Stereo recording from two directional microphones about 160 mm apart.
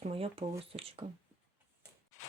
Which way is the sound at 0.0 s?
35° right (ahead or behind).